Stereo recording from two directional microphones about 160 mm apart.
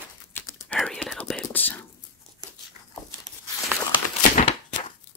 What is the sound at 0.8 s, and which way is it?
Whispering, 5° left (ahead or behind).